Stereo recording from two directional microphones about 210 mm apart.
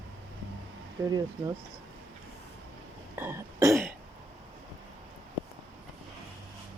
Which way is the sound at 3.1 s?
10° right (ahead or behind).